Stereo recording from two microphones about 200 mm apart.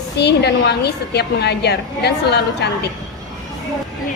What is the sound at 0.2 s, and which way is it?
A woman's voice, 55° left (ahead or behind).